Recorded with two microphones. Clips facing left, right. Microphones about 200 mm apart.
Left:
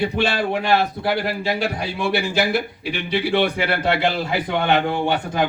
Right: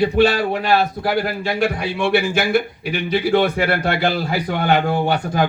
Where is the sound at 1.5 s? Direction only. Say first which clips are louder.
Right 4 dB; 55° right (ahead or behind).